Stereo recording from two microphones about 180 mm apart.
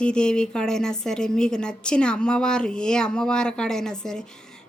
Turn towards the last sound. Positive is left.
turn(degrees=5)  # may be behind; listen again after turning